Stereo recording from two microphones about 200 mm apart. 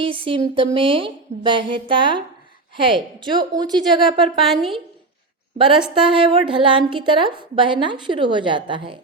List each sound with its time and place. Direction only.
0.0 s a woman's voice: 25° right (ahead or behind)
4.4 s a woman's voice: centre (ahead or behind)
5.9 s a woman's voice: 25° right (ahead or behind)